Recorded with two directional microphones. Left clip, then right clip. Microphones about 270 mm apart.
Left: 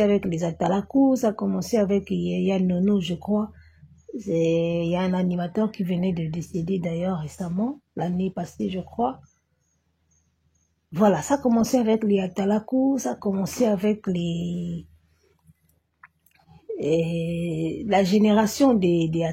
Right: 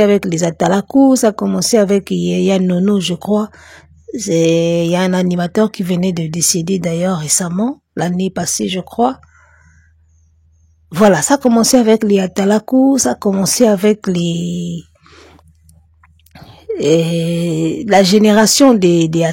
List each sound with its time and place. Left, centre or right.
0.0 s speech: right
10.9 s speech: right
16.7 s speech: right